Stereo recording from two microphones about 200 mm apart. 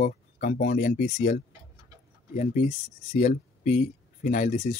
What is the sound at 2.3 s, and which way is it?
Speech, 40° left (ahead or behind).